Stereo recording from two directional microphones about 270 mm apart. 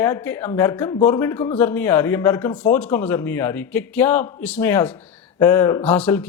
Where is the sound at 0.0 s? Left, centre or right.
Centre.